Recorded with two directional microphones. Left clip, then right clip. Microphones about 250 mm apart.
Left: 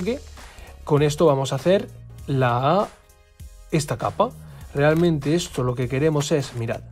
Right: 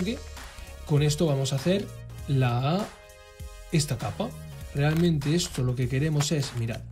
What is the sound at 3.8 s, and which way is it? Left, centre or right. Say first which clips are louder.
Speech: left 10 dB; centre.